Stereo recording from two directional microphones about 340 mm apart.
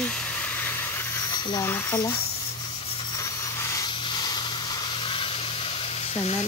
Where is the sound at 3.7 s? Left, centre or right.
Centre.